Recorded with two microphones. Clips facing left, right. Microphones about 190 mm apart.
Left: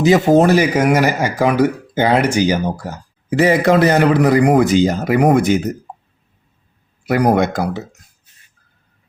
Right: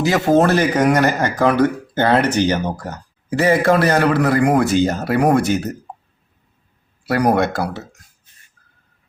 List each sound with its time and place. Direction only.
0.0 s speech: 20° left (ahead or behind)
3.2 s speech: 20° left (ahead or behind)
7.0 s speech: 20° left (ahead or behind)